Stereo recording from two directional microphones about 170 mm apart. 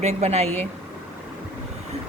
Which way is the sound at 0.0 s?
40° right (ahead or behind).